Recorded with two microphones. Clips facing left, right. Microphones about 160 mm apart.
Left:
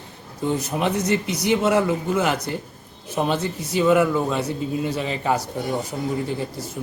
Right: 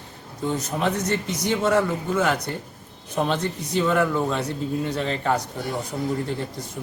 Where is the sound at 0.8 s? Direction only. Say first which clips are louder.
Left 2 dB; 10° left (ahead or behind).